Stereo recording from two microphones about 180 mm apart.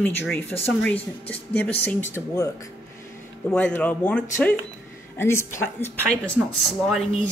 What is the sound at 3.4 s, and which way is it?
Speech, 10° left (ahead or behind).